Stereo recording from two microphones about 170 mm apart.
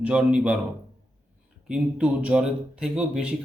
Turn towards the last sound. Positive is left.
turn(degrees=-5)  # may be behind; listen again after turning